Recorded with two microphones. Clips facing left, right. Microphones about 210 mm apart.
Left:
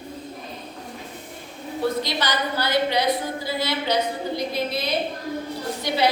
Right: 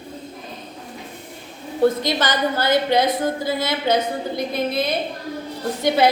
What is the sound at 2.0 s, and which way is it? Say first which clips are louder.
A woman's voice: right 4 dB; 50° right (ahead or behind).